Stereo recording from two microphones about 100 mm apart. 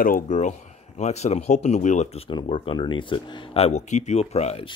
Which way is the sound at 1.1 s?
90° left.